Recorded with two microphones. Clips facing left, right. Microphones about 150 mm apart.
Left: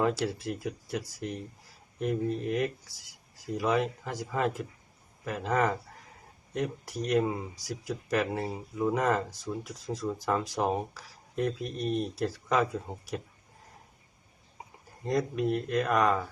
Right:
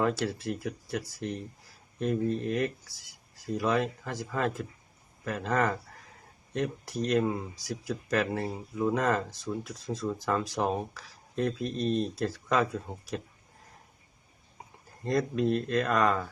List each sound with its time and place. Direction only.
0.0 s speech: 15° left (ahead or behind)
15.0 s speech: 15° left (ahead or behind)